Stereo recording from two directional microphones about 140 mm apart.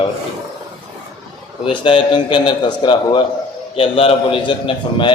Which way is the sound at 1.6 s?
35° left (ahead or behind).